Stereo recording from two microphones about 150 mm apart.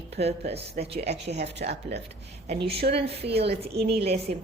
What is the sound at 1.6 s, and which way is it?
Speech, 80° right.